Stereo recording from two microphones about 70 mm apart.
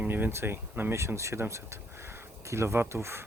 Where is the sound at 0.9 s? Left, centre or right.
Right.